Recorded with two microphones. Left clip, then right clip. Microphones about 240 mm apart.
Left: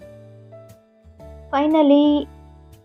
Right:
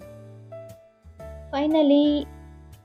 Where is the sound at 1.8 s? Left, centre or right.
Left.